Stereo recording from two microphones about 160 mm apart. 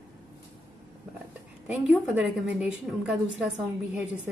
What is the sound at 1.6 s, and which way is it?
A woman's voice, 5° right (ahead or behind).